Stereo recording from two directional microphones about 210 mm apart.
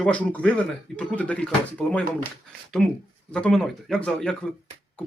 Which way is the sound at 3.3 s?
5° left (ahead or behind).